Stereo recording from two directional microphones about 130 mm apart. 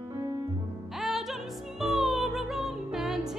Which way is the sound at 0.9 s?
Centre (ahead or behind).